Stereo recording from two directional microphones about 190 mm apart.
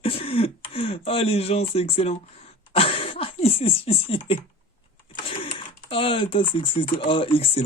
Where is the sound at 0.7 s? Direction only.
30° left (ahead or behind).